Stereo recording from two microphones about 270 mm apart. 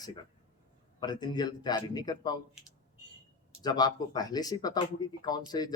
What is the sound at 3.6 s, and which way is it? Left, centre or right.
Speech, centre.